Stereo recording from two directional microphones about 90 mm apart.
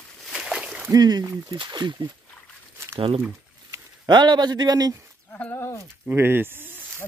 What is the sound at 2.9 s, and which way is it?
Speech, 85° right.